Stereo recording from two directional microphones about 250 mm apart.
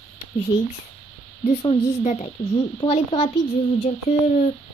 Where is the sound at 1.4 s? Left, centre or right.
Left.